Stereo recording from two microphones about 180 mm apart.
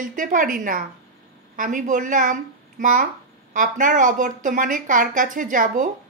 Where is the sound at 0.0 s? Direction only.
50° right (ahead or behind).